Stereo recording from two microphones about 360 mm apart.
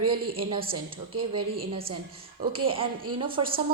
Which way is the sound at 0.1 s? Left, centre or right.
Centre.